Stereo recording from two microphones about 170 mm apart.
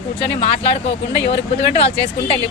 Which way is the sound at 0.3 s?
35° left (ahead or behind).